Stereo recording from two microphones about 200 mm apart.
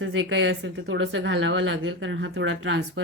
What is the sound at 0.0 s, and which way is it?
A woman's voice, 75° right (ahead or behind).